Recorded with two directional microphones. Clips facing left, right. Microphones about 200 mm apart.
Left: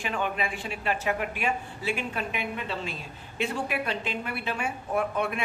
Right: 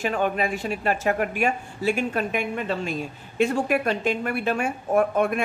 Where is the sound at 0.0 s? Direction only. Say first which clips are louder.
Right 6 dB; 40° right (ahead or behind).